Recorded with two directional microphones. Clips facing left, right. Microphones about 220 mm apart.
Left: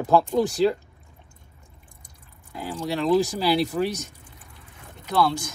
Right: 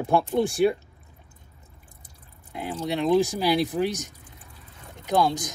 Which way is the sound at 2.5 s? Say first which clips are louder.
Even; 20° right (ahead or behind).